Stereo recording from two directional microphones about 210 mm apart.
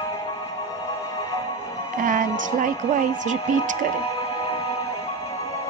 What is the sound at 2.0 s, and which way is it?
A woman's voice, 40° right (ahead or behind).